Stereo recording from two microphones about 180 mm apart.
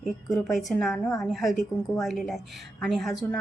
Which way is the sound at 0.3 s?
Centre (ahead or behind).